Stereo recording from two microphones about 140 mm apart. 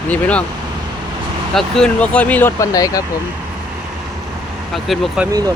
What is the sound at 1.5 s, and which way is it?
Speech, 5° left (ahead or behind).